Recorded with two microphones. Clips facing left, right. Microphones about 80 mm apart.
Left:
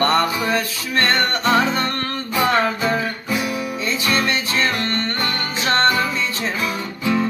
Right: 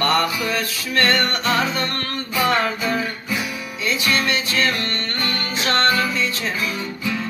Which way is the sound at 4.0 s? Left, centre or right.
Left.